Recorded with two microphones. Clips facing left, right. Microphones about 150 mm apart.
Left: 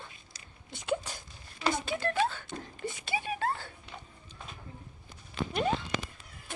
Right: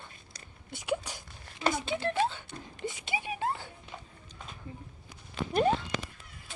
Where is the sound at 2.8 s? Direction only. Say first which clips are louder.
Right 1 dB; 15° right (ahead or behind).